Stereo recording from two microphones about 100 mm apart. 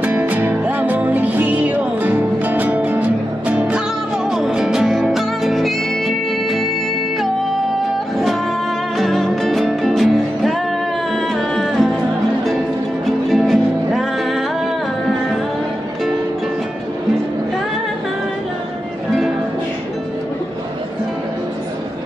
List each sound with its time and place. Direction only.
0.0 s music: 15° right (ahead or behind); by 6.7 s centre (ahead or behind)
8.9 s music: centre (ahead or behind)
13.3 s music: centre (ahead or behind)